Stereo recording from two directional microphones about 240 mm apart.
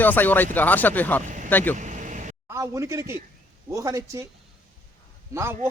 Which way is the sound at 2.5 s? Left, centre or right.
Centre.